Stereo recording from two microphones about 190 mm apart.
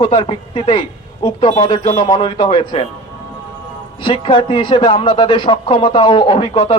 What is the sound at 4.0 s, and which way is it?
A man's voice, 25° left (ahead or behind).